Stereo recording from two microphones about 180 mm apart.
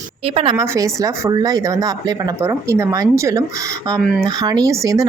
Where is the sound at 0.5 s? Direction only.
15° right (ahead or behind).